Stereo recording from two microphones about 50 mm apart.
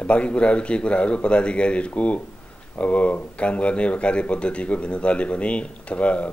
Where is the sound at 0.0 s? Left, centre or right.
Left.